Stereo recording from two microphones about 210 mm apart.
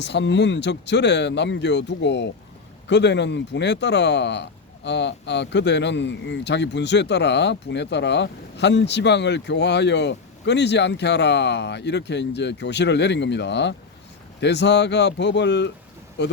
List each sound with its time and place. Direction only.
0.0 s speech: 55° left (ahead or behind)